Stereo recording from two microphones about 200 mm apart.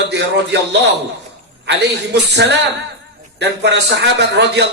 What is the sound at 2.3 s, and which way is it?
A man's voice, 60° right (ahead or behind).